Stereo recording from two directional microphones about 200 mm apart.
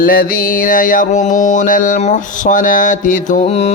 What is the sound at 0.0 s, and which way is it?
Mantra, 45° left (ahead or behind).